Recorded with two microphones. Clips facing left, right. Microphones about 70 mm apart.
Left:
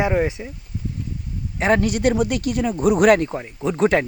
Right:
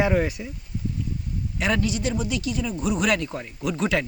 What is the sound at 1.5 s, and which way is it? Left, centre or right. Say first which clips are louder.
Speech: left 6 dB; left.